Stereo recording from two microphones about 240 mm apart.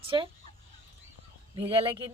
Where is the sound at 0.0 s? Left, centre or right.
Right.